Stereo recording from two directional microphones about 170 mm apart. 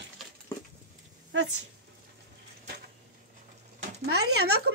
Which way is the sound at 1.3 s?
90° right.